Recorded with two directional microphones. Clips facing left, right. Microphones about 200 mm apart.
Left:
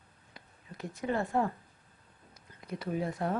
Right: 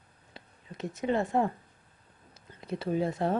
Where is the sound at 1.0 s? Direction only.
20° right (ahead or behind).